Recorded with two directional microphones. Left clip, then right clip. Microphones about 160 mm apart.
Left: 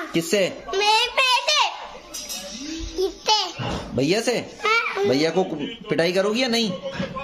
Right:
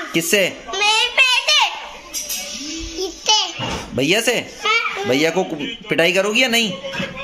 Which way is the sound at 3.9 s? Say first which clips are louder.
Right 5 dB; centre (ahead or behind).